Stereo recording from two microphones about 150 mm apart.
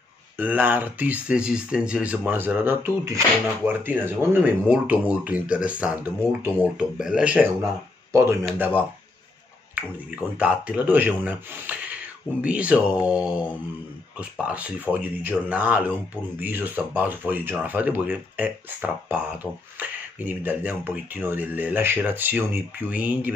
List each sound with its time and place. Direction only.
0.4 s speech: 10° right (ahead or behind)
8.1 s speech: 20° right (ahead or behind)
9.8 s speech: 10° right (ahead or behind)